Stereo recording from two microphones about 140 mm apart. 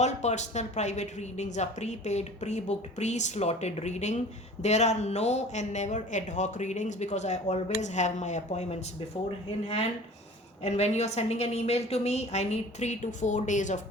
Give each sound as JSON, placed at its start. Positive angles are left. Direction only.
{"t": 0.0, "sound": "a woman's voice", "side_deg": 55}
{"t": 10.6, "sound": "a woman's voice", "side_deg": 50}